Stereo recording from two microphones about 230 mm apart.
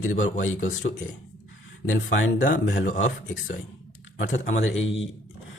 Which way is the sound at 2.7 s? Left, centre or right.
Left.